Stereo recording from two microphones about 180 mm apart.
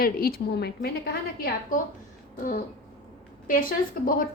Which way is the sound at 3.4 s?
50° left (ahead or behind).